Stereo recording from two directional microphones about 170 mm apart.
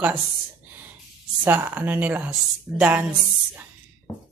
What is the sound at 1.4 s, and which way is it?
Speech, 10° right (ahead or behind).